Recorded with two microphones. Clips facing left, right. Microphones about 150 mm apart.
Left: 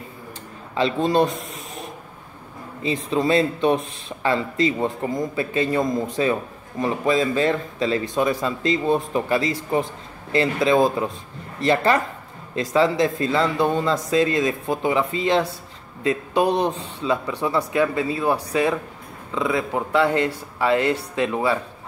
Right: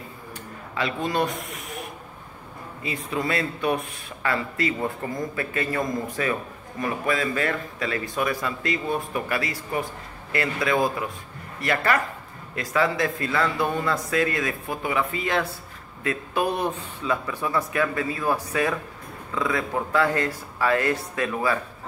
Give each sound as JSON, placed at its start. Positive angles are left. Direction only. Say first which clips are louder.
{"t": 0.7, "sound": "speech", "louder": "left 6 dB", "side_deg": 30}
{"t": 2.8, "sound": "speech", "louder": "left 6 dB", "side_deg": 25}